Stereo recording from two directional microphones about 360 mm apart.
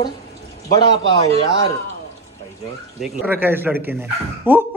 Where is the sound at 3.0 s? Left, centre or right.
Centre.